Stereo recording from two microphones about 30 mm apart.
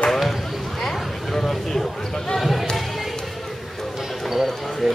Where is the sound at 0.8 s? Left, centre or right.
Centre.